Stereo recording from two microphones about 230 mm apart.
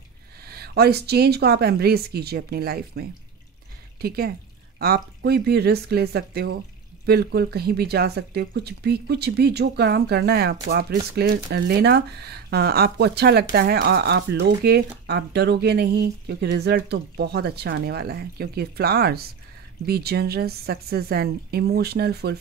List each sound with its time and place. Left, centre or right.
0.5 s speech: right